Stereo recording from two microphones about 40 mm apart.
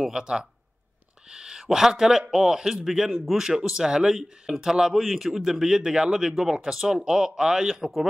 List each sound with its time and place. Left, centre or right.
0.1 s a man's voice: centre
3.4 s a man's voice: centre